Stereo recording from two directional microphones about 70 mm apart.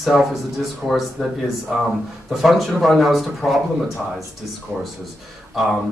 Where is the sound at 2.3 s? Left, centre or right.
Centre.